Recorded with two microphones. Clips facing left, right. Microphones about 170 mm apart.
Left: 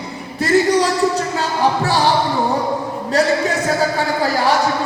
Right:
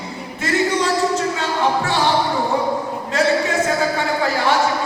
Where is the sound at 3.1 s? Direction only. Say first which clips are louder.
Left 1 dB; 40° left (ahead or behind).